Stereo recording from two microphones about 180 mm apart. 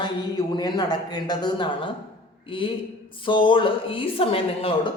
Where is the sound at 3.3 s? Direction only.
25° left (ahead or behind).